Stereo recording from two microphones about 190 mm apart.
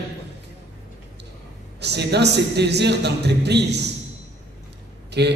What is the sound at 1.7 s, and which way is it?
A man's voice, 60° right (ahead or behind).